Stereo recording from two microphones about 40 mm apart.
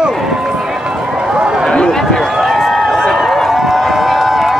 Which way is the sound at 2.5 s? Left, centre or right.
Centre.